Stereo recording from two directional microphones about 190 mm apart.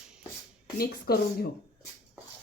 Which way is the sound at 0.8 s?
55° left (ahead or behind).